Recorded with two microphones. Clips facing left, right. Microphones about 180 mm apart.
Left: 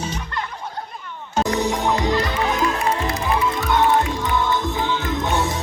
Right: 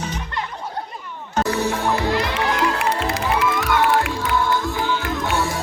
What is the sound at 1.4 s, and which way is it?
Music, 15° left (ahead or behind).